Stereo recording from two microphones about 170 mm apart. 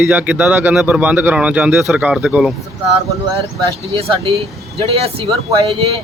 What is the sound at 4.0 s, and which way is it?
Speech, 35° right (ahead or behind).